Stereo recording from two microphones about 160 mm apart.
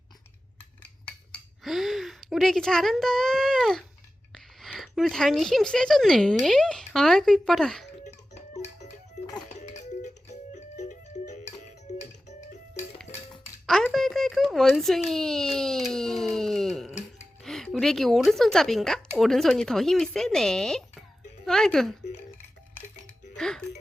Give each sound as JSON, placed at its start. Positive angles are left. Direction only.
{"t": 1.0, "sound": "a sound", "side_deg": 5}
{"t": 4.6, "sound": "a woman's voice", "side_deg": 0}
{"t": 8.0, "sound": "music", "side_deg": 45}
{"t": 13.7, "sound": "a child's voice", "side_deg": 5}
{"t": 23.4, "sound": "music", "side_deg": 5}